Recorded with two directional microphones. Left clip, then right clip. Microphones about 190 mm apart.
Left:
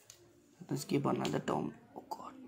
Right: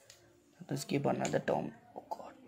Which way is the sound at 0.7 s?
15° right (ahead or behind).